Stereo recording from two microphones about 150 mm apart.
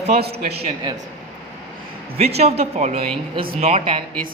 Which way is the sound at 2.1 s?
45° right (ahead or behind).